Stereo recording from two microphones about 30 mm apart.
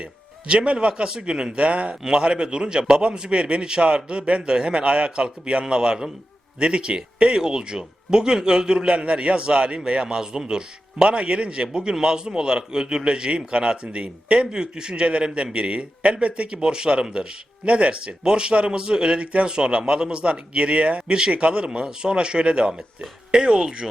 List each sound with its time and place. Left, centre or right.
0.0 s music: right
0.7 s speech: right
2.0 s speech: right
8.9 s speech: right
11.1 s speech: right
15.0 s speech: right
18.2 s speech: right
19.5 s speech: right